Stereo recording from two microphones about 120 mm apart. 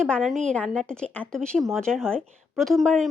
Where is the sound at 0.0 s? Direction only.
5° left (ahead or behind).